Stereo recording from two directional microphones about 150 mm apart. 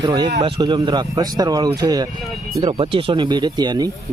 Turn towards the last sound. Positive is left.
turn(degrees=-30)  # may be behind; listen again after turning